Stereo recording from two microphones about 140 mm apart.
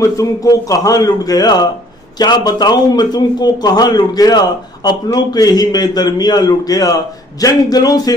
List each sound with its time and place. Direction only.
0.0 s a man's voice: 25° left (ahead or behind)